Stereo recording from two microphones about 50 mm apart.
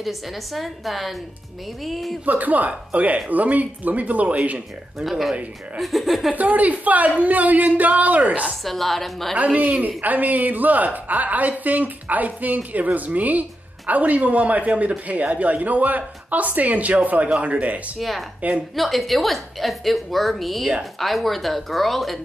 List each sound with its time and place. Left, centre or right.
0.0 s a woman's voice: centre
2.2 s a man's voice: right
4.9 s a woman's voice: centre
6.3 s a man's voice: right
8.6 s a woman's voice: centre
9.4 s a man's voice: right
17.9 s a woman's voice: centre
18.4 s a man's voice: right
18.8 s a woman's voice: centre